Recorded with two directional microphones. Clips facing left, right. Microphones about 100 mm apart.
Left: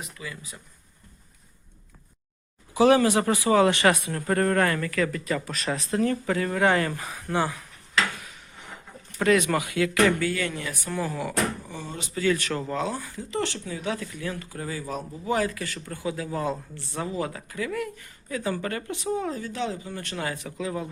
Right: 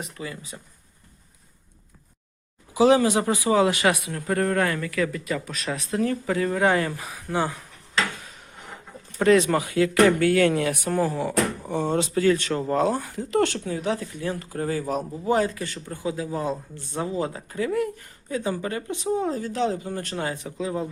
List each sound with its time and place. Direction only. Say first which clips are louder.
0.2 s speech: right 4 dB; 30° right (ahead or behind)
2.7 s speech: right 1 dB; 15° right (ahead or behind)
9.1 s speech: right 3 dB; 30° right (ahead or behind)
10.2 s speech: right 9 dB; 65° right (ahead or behind)
10.9 s speech: right 3 dB; 30° right (ahead or behind)
11.7 s speech: right 11 dB; 65° right (ahead or behind)
12.2 s speech: even; 30° right (ahead or behind)
12.7 s speech: right 6 dB; 45° right (ahead or behind)
15.2 s speech: right 2 dB; 35° right (ahead or behind)
18.5 s speech: right 2 dB; 15° right (ahead or behind)
19.1 s speech: right 5 dB; 35° right (ahead or behind)
20.1 s speech: even; 25° right (ahead or behind)